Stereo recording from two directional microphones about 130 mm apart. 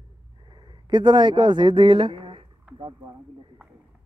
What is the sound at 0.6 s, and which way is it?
Speech, 35° right (ahead or behind).